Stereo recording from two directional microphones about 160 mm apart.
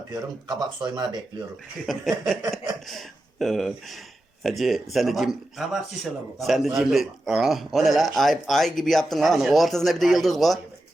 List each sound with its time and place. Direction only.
0.1 s speech: 25° right (ahead or behind)
1.9 s speech: centre (ahead or behind)